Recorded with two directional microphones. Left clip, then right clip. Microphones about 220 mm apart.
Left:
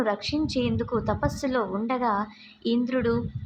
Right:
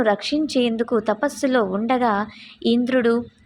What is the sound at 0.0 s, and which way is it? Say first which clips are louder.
Speech: right 6 dB; 20° right (ahead or behind).